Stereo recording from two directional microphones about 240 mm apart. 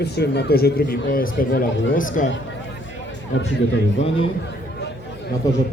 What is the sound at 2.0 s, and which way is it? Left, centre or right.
Speech, left.